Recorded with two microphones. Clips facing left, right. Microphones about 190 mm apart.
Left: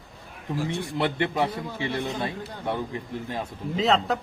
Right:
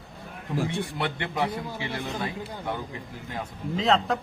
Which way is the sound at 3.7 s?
5° left (ahead or behind).